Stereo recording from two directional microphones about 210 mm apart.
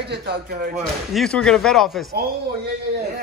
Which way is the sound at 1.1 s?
Centre (ahead or behind).